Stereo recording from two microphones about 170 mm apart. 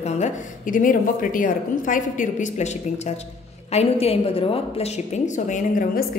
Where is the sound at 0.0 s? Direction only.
45° left (ahead or behind).